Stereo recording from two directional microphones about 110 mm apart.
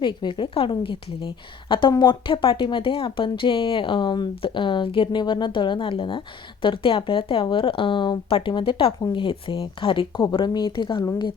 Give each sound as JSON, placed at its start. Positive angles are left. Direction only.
{"t": 0.0, "sound": "speech", "side_deg": 45}
{"t": 10.3, "sound": "speech", "side_deg": 40}